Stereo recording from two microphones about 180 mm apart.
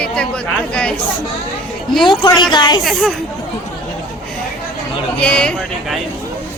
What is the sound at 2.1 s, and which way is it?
Speech, 25° left (ahead or behind).